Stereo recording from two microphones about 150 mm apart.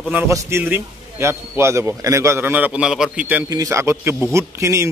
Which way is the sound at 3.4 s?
20° right (ahead or behind).